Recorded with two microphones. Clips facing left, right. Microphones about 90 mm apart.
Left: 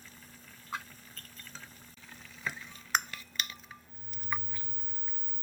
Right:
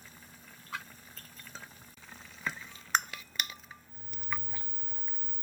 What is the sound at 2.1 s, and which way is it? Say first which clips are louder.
Boiling: right 1 dB; 20° right (ahead or behind).